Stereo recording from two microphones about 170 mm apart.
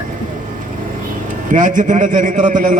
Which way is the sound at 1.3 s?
50° right (ahead or behind).